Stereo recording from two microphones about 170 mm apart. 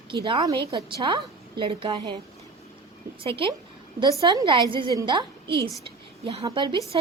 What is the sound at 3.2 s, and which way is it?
A woman's voice, 30° right (ahead or behind).